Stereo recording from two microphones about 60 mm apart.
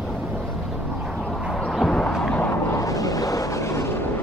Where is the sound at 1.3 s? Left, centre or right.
Centre.